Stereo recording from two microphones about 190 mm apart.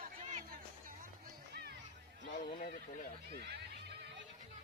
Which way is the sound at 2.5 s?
50° left (ahead or behind).